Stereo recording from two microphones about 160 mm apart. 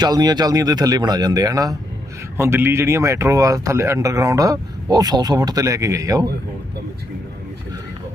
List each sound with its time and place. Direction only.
0.0 s speech: 25° right (ahead or behind)